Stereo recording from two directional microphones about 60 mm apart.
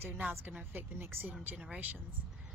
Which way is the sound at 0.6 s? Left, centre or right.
Right.